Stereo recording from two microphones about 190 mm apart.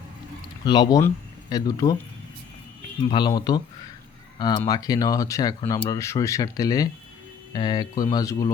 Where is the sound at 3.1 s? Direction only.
20° left (ahead or behind).